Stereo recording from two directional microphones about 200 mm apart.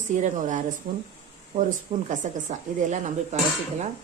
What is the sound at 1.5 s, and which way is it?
Speech, 35° right (ahead or behind).